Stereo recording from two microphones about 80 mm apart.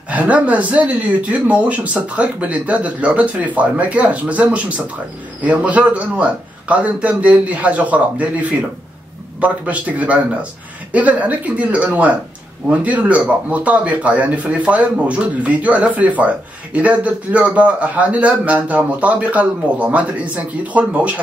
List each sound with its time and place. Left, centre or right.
0.1 s speech: centre